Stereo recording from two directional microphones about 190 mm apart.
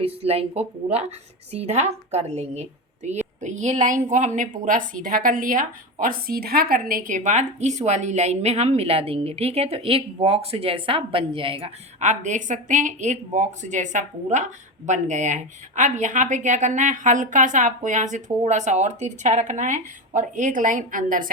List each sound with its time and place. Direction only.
0.0 s a woman's voice: 35° right (ahead or behind)